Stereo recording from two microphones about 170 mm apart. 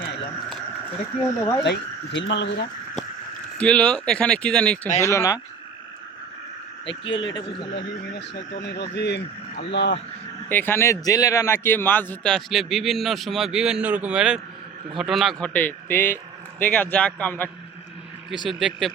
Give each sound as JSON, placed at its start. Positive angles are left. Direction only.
{"t": 1.2, "sound": "a man's voice", "side_deg": 15}
{"t": 1.6, "sound": "speech", "side_deg": 85}
{"t": 3.6, "sound": "speech", "side_deg": 5}
{"t": 4.9, "sound": "a man's voice", "side_deg": 15}
{"t": 6.8, "sound": "speech", "side_deg": 30}
{"t": 7.7, "sound": "speech", "side_deg": 90}
{"t": 10.5, "sound": "a man's voice", "side_deg": 10}
{"t": 18.4, "sound": "speech", "side_deg": 0}